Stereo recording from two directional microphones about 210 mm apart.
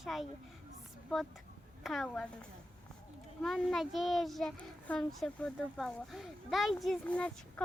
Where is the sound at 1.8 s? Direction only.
Centre (ahead or behind).